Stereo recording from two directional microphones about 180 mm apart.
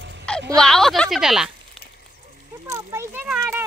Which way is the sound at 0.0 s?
85° right.